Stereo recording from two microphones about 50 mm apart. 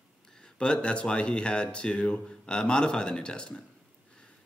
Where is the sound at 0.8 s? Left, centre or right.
Centre.